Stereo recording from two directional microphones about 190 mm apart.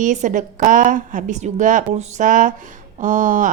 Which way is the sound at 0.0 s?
40° right (ahead or behind).